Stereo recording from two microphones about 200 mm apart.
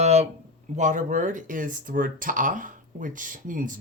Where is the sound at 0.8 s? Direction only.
40° right (ahead or behind).